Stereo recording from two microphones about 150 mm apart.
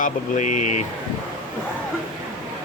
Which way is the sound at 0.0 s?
55° left (ahead or behind).